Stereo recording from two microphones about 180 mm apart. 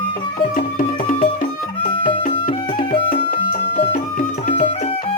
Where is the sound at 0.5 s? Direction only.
50° left (ahead or behind).